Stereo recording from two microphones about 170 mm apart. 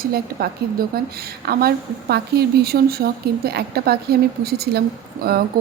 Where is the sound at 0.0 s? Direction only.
60° right (ahead or behind).